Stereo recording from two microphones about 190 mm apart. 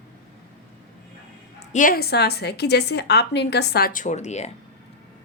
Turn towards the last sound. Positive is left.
turn(degrees=35)  # may be behind; listen again after turning